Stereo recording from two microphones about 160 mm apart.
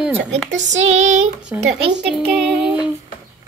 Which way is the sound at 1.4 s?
5° right (ahead or behind).